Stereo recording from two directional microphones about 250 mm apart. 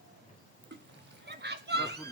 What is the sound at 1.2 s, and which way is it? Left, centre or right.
Children playing, right.